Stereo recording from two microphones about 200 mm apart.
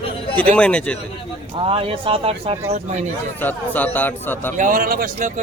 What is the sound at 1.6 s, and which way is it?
Speech, 25° right (ahead or behind).